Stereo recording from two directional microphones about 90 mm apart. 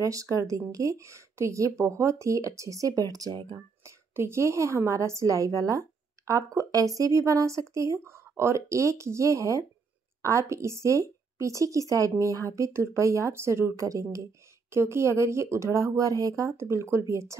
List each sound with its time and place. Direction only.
0.0 s a woman's voice: 40° right (ahead or behind)
3.5 s a woman's voice: 30° right (ahead or behind)